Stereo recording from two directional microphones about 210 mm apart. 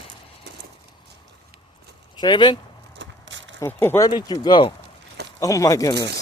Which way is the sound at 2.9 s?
60° right (ahead or behind).